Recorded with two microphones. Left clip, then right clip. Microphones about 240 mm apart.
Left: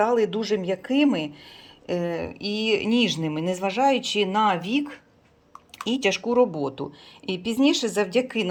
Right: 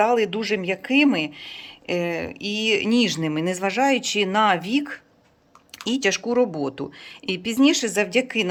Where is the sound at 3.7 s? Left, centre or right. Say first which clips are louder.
Even; right.